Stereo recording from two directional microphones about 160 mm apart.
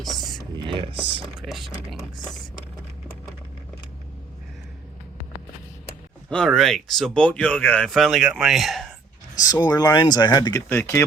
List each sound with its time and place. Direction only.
0.0 s whispering: centre (ahead or behind)
0.5 s a sound: 30° right (ahead or behind)
1.2 s a sound: centre (ahead or behind)
6.3 s speech: 5° left (ahead or behind)
9.3 s speech: 25° left (ahead or behind)
10.7 s speech: 15° left (ahead or behind)